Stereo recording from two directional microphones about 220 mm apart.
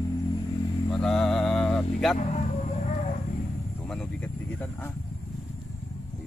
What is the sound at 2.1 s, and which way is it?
Speech, 35° left (ahead or behind).